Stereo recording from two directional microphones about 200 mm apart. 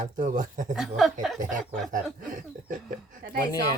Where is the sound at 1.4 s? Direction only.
40° right (ahead or behind).